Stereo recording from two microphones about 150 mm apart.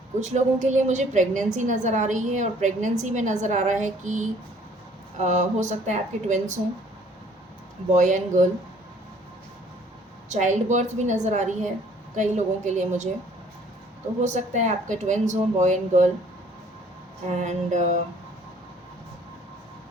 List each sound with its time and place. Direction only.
0.2 s a woman's voice: 50° right (ahead or behind)
7.9 s speech: 55° right (ahead or behind)
10.2 s a woman's voice: 55° right (ahead or behind)
14.2 s a woman's voice: 50° right (ahead or behind)
17.2 s a woman's voice: 50° right (ahead or behind)